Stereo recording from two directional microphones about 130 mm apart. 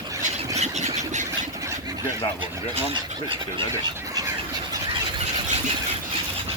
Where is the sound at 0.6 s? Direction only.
60° right (ahead or behind).